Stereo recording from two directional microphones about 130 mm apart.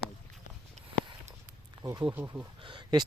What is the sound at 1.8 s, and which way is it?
Speech, 25° right (ahead or behind).